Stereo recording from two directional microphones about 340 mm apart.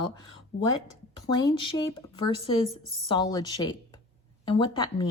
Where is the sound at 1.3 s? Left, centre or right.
Centre.